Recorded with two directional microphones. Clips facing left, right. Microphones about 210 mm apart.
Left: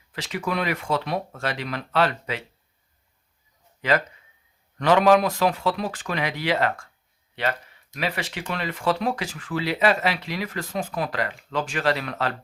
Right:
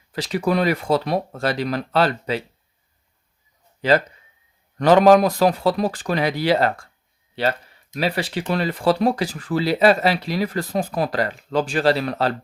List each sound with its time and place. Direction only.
0.1 s speech: 35° right (ahead or behind)
3.8 s a man's voice: 30° right (ahead or behind)
7.9 s speech: 35° right (ahead or behind)